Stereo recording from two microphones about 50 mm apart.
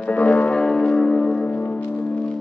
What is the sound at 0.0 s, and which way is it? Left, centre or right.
Music, left.